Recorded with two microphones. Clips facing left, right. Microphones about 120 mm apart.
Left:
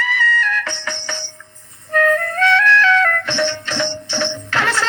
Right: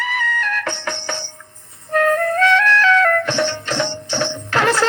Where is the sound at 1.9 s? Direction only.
35° right (ahead or behind).